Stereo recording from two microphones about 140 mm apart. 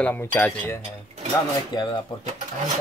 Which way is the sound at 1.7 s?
30° left (ahead or behind).